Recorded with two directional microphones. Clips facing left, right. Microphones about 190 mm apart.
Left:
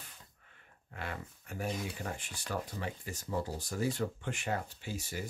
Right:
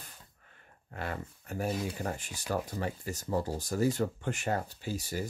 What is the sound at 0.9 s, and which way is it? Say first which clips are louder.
Speech: right 4 dB; 40° right (ahead or behind).